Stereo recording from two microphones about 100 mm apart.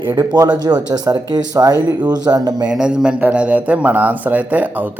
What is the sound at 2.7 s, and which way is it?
A man's voice, 5° right (ahead or behind).